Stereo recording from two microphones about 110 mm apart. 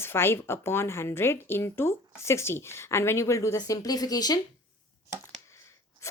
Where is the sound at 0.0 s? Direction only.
20° left (ahead or behind).